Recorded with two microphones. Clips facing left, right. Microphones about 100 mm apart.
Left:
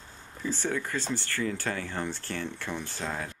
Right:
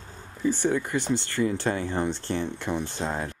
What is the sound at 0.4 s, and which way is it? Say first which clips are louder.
Speech: right 6 dB; 15° right (ahead or behind).